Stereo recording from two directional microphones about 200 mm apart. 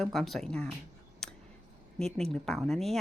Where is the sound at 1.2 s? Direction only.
5° left (ahead or behind).